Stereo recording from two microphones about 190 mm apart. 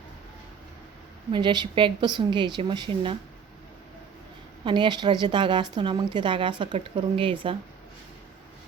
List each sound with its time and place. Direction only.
1.3 s a woman's voice: 25° right (ahead or behind)
4.6 s a woman's voice: 25° right (ahead or behind)